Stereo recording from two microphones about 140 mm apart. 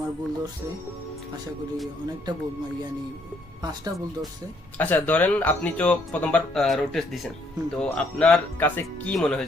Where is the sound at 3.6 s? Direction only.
30° right (ahead or behind).